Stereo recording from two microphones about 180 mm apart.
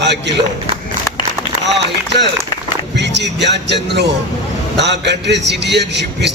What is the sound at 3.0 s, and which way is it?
Speech, 75° right (ahead or behind).